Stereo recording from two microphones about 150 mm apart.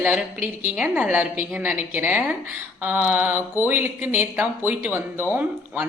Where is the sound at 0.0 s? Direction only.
10° right (ahead or behind).